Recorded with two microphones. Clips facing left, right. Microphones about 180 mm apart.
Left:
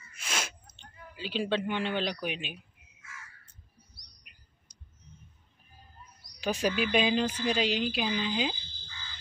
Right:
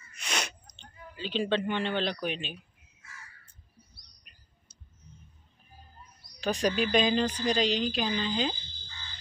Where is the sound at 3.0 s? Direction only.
35° right (ahead or behind).